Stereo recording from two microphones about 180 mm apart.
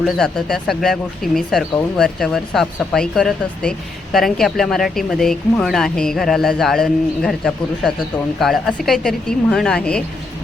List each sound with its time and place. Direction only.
0.0 s speech: centre (ahead or behind)